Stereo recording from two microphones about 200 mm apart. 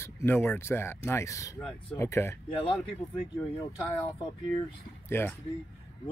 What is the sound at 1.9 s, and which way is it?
Speech, 15° left (ahead or behind).